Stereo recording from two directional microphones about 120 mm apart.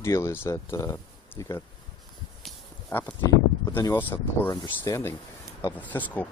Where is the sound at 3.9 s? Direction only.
20° left (ahead or behind).